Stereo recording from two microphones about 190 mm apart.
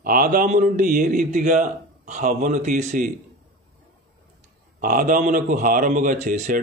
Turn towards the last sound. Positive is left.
turn(degrees=-40)  # may be behind; listen again after turning